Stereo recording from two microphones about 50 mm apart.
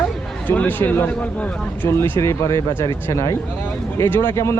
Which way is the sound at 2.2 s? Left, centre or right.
Left.